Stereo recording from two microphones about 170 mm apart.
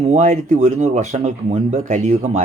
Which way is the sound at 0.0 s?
40° right (ahead or behind).